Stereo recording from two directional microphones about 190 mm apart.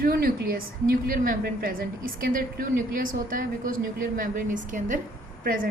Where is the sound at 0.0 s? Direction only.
50° right (ahead or behind).